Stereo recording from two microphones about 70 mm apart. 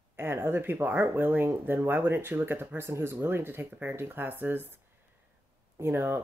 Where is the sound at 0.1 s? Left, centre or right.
Right.